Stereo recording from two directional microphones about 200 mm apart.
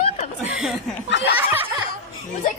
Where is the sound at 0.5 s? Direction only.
Centre (ahead or behind).